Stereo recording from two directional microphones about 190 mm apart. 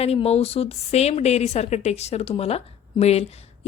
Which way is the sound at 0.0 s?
30° left (ahead or behind).